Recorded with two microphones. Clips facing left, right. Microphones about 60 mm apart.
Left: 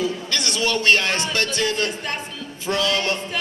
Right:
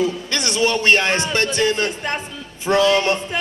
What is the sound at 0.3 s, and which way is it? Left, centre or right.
A man's voice, right.